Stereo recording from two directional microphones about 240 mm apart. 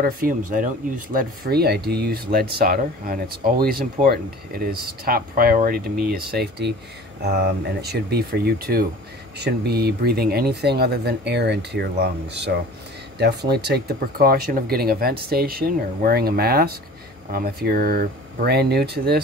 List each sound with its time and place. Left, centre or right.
0.0 s speech: right